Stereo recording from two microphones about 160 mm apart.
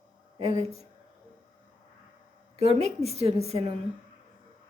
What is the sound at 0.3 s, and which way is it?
Speech, 40° right (ahead or behind).